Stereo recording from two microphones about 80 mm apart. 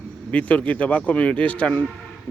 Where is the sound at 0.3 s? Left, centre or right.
Centre.